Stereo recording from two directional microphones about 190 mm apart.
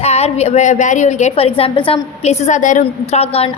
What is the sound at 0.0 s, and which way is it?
A woman's voice, 35° left (ahead or behind).